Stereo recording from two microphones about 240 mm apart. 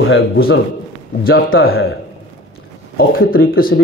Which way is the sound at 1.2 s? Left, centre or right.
Left.